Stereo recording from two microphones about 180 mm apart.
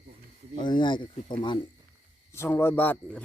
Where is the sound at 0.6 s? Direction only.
25° left (ahead or behind).